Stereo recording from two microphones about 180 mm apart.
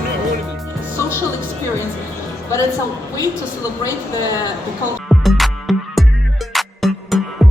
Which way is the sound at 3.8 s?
20° left (ahead or behind).